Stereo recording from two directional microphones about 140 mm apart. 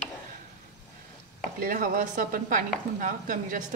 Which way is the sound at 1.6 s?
85° right.